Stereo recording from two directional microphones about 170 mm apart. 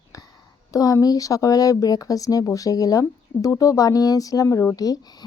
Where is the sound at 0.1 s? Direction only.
20° left (ahead or behind).